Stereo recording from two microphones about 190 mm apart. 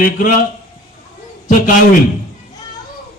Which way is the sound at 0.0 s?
45° left (ahead or behind).